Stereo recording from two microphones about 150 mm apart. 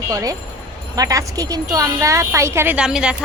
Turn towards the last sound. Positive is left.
turn(degrees=-5)  # may be behind; listen again after turning